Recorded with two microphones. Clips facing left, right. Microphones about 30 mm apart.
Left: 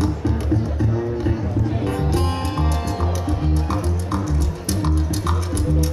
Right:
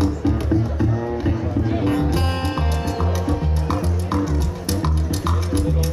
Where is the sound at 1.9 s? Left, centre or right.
Centre.